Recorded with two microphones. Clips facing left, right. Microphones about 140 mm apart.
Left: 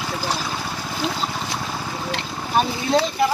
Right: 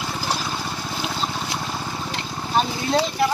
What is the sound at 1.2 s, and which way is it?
Boat, centre (ahead or behind).